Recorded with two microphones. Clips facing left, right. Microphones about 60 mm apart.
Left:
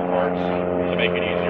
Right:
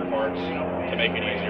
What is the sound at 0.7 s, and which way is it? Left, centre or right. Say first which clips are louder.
Speech: left 5 dB; centre.